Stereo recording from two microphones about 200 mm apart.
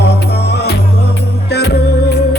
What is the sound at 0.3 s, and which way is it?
Music, 55° left (ahead or behind).